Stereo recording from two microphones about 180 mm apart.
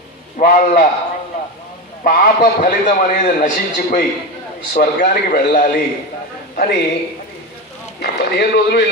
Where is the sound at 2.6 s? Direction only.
50° left (ahead or behind).